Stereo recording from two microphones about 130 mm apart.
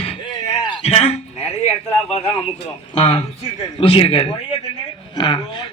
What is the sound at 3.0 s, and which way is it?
A man's voice, 40° left (ahead or behind).